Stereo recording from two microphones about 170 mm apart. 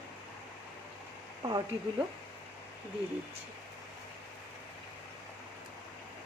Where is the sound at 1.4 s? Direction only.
25° right (ahead or behind).